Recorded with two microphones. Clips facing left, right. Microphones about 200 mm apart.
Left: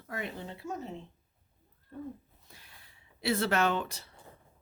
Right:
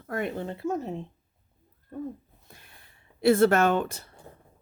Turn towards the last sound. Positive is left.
turn(degrees=-50)  # may be behind; listen again after turning